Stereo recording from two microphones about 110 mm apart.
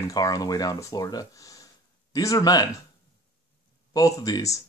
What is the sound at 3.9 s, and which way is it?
Speech, 35° left (ahead or behind).